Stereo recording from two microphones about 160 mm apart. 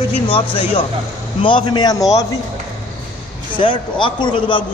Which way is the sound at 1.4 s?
30° left (ahead or behind).